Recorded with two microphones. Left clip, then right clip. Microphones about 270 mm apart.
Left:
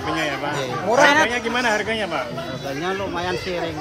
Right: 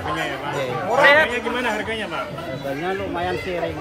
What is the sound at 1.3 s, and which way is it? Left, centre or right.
Speech, left.